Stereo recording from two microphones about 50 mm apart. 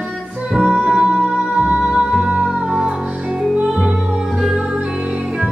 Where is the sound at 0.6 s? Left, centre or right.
Centre.